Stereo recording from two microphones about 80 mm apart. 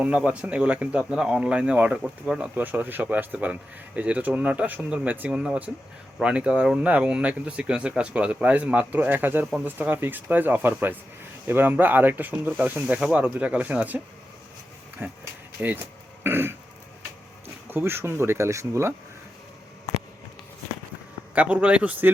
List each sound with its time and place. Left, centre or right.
0.3 s speech: centre
2.6 s speech: right
15.0 s speech: right
17.7 s speech: right
21.3 s speech: centre